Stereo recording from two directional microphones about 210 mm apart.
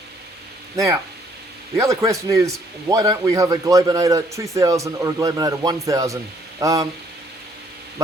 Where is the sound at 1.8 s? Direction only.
15° right (ahead or behind).